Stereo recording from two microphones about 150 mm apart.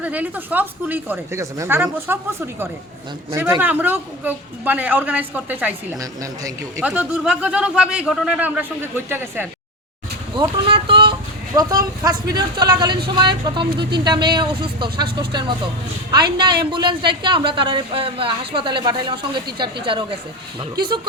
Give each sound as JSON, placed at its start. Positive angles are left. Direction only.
{"t": 0.0, "sound": "speech", "side_deg": -10}
{"t": 3.6, "sound": "speech", "side_deg": -10}
{"t": 6.0, "sound": "a man's voice", "side_deg": -20}
{"t": 6.8, "sound": "speech", "side_deg": -10}
{"t": 10.3, "sound": "speech", "side_deg": -35}
{"t": 11.1, "sound": "a sound", "side_deg": -25}
{"t": 12.0, "sound": "a man's voice", "side_deg": -30}